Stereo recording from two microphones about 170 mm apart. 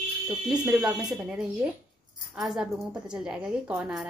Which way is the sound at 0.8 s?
Centre (ahead or behind).